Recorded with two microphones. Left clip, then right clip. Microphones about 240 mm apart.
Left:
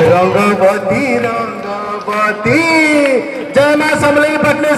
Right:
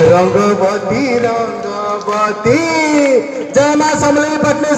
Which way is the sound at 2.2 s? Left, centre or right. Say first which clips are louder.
Left 2 dB; right.